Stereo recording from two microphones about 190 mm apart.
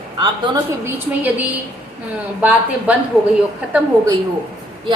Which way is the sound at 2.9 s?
5° right (ahead or behind).